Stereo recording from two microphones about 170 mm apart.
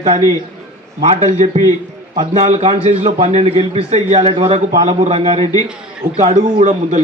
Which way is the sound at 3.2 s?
35° right (ahead or behind).